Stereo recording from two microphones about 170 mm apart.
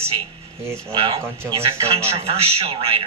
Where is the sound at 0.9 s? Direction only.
30° right (ahead or behind).